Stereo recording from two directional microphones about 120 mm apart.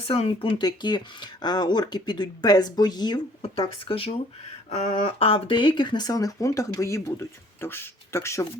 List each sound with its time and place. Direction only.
0.1 s speech: 50° left (ahead or behind)
0.6 s speech: 35° left (ahead or behind)
3.8 s speech: 50° left (ahead or behind); by 8.4 s 25° left (ahead or behind)